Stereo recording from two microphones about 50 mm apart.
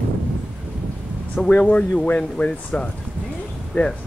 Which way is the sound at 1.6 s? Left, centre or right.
Left.